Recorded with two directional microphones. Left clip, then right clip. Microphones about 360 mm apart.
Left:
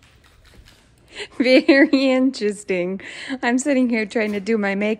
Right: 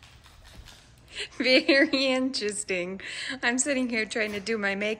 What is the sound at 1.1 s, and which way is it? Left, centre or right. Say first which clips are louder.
Speech: left 7 dB; centre.